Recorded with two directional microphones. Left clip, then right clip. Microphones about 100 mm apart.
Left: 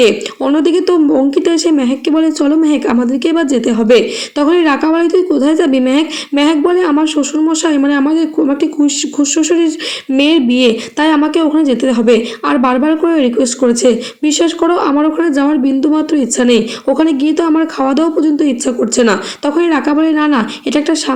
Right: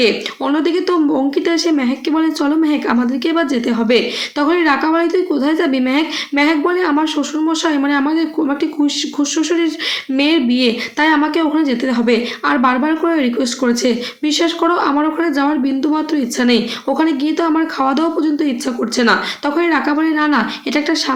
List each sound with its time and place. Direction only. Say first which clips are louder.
0.0 s speech: left 5 dB; 35° left (ahead or behind)